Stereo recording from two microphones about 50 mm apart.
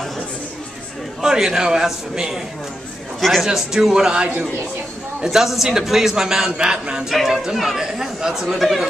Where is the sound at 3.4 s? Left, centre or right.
Centre.